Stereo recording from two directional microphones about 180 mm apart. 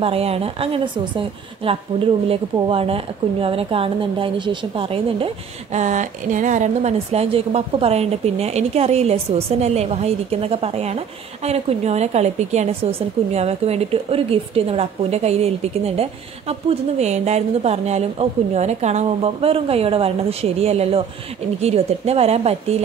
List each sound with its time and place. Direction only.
0.0 s a woman's voice: 35° right (ahead or behind)